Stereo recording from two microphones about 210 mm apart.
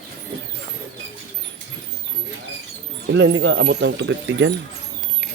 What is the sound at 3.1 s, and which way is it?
Speech, 70° right (ahead or behind).